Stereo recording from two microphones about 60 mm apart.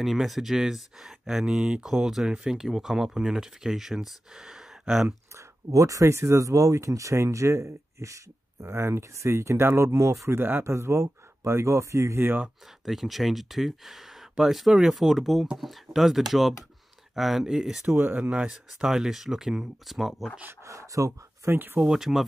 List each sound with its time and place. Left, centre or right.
0.0 s speech: centre
5.7 s speech: right
8.7 s speech: right
12.2 s speech: right
12.8 s speech: centre
17.8 s speech: right
18.2 s speech: right
18.5 s speech: centre
20.6 s speech: right
21.7 s speech: centre